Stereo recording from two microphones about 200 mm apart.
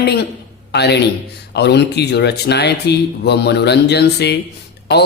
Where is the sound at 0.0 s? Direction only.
55° left (ahead or behind).